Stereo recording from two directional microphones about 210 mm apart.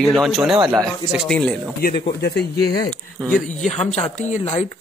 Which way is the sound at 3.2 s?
5° left (ahead or behind).